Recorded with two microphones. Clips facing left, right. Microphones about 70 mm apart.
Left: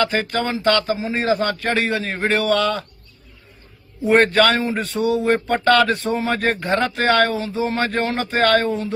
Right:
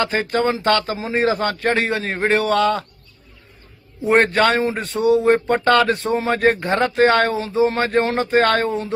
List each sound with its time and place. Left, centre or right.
0.0 s a man's voice: right
4.0 s speech: right